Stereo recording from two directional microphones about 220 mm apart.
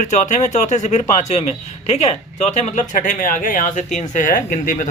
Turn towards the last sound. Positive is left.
turn(degrees=40)  # may be behind; listen again after turning